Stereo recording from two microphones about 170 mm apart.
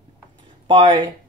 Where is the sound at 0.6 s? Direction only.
30° right (ahead or behind).